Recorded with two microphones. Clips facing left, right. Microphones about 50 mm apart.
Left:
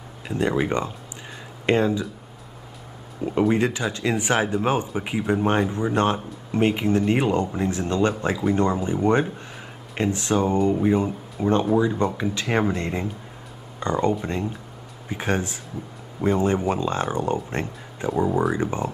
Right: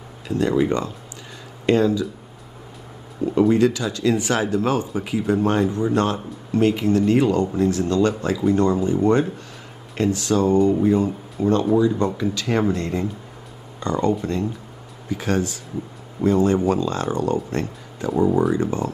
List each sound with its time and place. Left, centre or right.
0.3 s speech: left
3.3 s speech: left
18.1 s speech: centre
18.5 s speech: left